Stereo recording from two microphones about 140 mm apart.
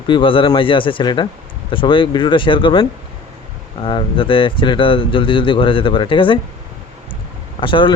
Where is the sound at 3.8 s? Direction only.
40° left (ahead or behind).